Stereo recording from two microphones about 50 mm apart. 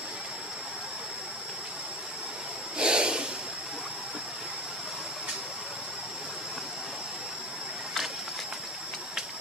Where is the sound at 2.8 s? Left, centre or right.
Centre.